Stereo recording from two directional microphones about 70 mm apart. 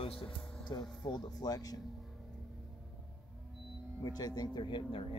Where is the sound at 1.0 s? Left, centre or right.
Left.